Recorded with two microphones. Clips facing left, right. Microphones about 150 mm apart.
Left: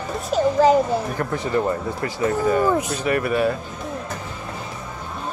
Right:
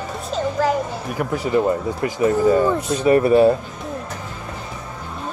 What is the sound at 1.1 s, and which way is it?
Speech, 10° right (ahead or behind).